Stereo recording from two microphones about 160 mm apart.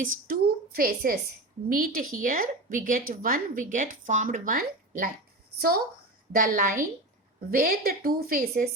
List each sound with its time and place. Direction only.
0.0 s a woman's voice: 60° right (ahead or behind)
6.4 s a woman's voice: 55° right (ahead or behind)